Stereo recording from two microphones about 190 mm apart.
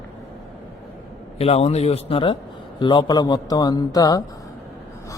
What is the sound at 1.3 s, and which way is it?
A man's voice, 30° left (ahead or behind).